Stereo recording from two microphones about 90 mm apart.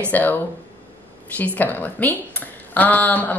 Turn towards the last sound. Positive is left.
turn(degrees=20)  # may be behind; listen again after turning